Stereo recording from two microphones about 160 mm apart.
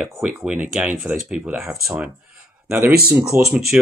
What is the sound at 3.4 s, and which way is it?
Speech, 5° right (ahead or behind).